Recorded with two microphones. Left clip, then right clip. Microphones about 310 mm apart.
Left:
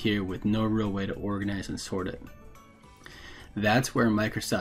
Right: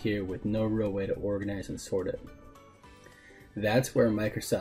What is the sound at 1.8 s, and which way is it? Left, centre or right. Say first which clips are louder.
Speech: right 3 dB; centre.